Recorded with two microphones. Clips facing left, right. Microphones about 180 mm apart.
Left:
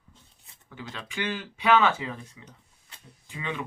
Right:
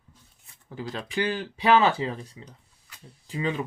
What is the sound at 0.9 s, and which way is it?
Speech, 35° right (ahead or behind).